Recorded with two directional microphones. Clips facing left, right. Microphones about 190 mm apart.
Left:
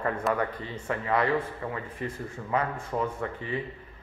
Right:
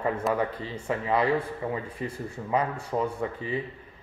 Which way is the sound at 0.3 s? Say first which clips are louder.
Right 1 dB; 20° right (ahead or behind).